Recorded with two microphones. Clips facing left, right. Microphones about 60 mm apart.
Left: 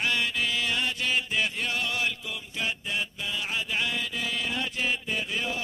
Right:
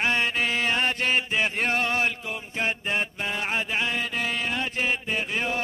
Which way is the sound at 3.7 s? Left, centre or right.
Right.